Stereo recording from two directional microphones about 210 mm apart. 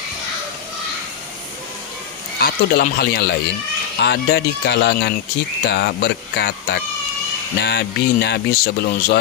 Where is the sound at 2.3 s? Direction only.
45° left (ahead or behind).